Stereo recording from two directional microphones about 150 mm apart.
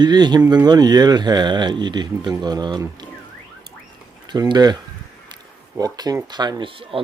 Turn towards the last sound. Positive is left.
turn(degrees=-35)  # may be behind; listen again after turning